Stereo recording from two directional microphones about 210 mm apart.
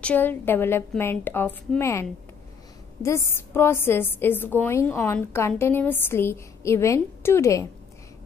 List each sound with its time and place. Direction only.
0.0 s a woman's voice: 10° left (ahead or behind)